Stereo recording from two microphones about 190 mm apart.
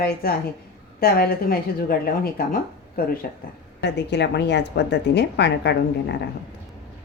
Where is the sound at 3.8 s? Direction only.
65° left (ahead or behind).